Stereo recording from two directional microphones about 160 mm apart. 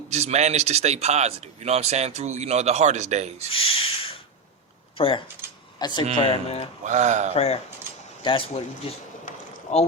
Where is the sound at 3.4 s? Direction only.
35° left (ahead or behind).